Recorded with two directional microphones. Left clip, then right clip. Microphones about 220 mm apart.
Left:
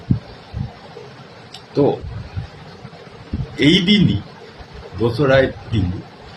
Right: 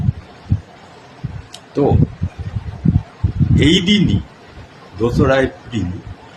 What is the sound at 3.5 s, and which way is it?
A man's voice, 15° right (ahead or behind).